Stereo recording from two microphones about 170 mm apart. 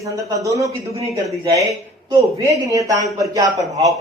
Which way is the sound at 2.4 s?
20° right (ahead or behind).